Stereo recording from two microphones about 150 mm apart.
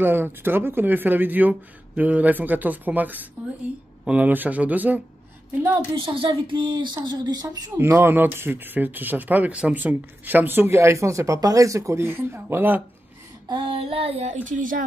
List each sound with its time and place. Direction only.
0.0 s speech: 15° right (ahead or behind)
5.7 s child singing: 35° right (ahead or behind)
7.1 s speech: 25° right (ahead or behind)
7.8 s speech: 15° right (ahead or behind)
13.5 s child singing: 35° right (ahead or behind); by 14.9 s 60° right (ahead or behind)